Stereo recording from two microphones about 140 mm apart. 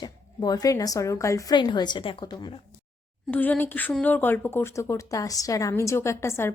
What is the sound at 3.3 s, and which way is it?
A woman's voice, 15° left (ahead or behind).